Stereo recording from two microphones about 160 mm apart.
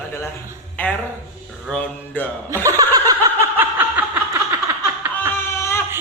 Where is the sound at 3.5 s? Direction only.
10° right (ahead or behind).